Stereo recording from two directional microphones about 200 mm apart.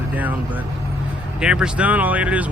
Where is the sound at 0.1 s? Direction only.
10° right (ahead or behind).